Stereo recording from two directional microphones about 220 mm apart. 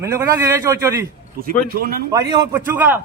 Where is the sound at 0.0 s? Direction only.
15° right (ahead or behind).